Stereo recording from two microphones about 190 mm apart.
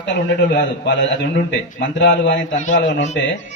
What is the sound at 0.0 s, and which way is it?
A man's voice, 70° left (ahead or behind).